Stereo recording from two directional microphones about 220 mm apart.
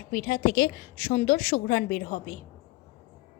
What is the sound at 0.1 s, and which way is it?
A woman's voice, 40° left (ahead or behind).